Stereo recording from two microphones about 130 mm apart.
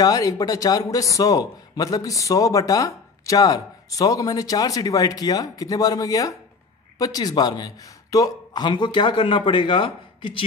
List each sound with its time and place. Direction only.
0.0 s a man's voice: 25° left (ahead or behind)